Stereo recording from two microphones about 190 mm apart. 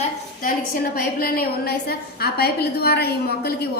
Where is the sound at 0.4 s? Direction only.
50° left (ahead or behind).